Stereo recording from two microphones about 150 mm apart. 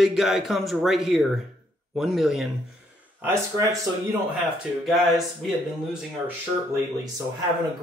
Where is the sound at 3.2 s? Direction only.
20° right (ahead or behind).